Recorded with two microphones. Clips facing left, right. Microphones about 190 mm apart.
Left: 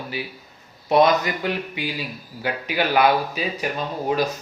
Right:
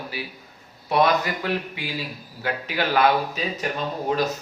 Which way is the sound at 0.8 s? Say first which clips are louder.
Left 3 dB; 20° left (ahead or behind).